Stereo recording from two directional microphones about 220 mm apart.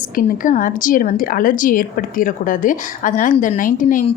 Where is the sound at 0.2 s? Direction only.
35° left (ahead or behind).